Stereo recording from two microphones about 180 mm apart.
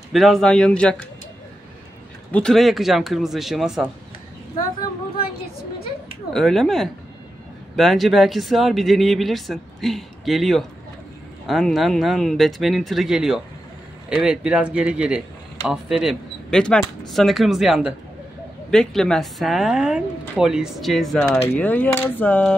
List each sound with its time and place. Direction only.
0.1 s a woman's voice: centre (ahead or behind)
2.3 s a woman's voice: centre (ahead or behind)
6.3 s a woman's voice: centre (ahead or behind)